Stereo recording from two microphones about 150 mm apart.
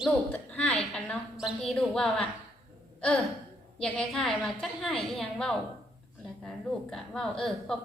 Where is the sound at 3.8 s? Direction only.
5° left (ahead or behind).